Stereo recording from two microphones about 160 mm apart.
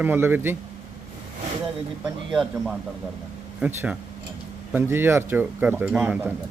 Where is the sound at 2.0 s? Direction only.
Centre (ahead or behind).